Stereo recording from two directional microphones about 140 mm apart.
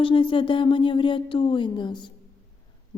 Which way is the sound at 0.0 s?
40° left (ahead or behind).